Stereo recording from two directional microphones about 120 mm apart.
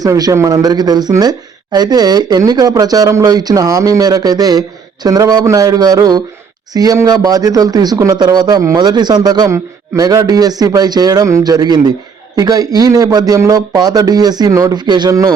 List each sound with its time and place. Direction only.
0.0 s speech: 30° right (ahead or behind)